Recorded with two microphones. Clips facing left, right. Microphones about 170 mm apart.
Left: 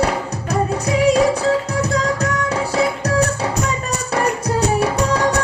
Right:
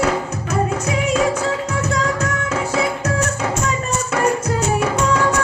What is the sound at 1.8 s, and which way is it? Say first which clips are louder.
Music: left 1 dB; 35° left (ahead or behind).